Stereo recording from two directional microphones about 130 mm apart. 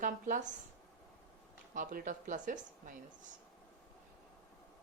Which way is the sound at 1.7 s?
90° right.